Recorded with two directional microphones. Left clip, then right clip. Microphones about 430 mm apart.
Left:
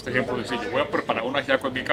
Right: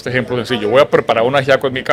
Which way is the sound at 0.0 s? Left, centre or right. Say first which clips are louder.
Right 7 dB; right.